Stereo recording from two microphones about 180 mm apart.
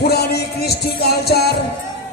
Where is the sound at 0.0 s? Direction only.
65° left (ahead or behind).